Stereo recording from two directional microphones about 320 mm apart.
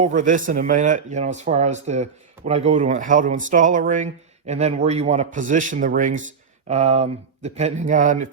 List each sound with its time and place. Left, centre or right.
0.0 s speech: right